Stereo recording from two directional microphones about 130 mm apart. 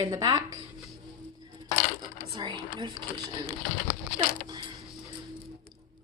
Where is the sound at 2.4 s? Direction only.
35° right (ahead or behind).